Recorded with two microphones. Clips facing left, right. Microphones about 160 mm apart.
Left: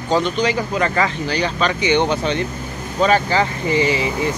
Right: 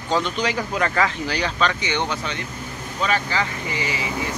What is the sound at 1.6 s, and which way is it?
Speech, 15° left (ahead or behind).